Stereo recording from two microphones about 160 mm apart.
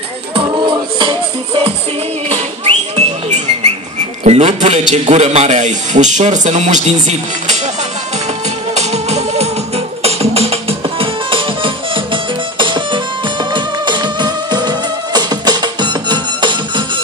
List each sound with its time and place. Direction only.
0.3 s music: 30° right (ahead or behind)
2.2 s a sound: 40° right (ahead or behind)
4.2 s a man's voice: 45° right (ahead or behind)
8.7 s music: 45° right (ahead or behind)